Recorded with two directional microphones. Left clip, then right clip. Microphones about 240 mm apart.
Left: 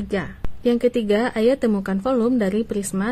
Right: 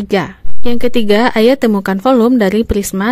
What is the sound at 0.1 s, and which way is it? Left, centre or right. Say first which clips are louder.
A woman's voice: right 12 dB; right.